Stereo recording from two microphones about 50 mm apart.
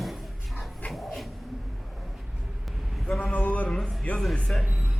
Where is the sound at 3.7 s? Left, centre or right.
Centre.